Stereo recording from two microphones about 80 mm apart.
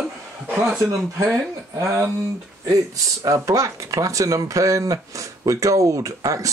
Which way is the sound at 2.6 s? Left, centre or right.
Right.